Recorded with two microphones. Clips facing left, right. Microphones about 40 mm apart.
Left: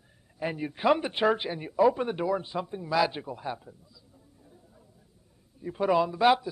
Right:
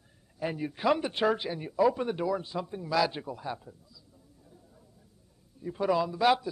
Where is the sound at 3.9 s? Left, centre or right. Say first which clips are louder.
Even; centre.